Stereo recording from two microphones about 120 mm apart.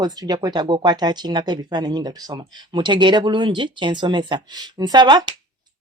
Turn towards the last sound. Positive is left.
turn(degrees=-40)  # may be behind; listen again after turning